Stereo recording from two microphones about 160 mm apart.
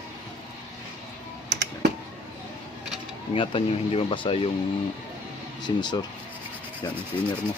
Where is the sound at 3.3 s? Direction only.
35° left (ahead or behind).